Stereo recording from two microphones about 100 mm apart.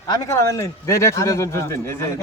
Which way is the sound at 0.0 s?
40° left (ahead or behind).